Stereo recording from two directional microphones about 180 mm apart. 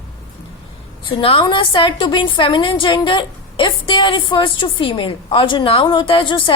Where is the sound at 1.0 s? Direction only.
30° left (ahead or behind).